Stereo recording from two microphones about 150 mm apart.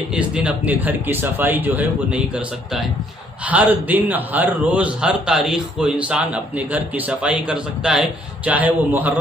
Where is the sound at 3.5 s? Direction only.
10° right (ahead or behind).